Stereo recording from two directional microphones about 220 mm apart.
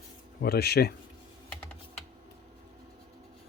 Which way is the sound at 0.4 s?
45° left (ahead or behind).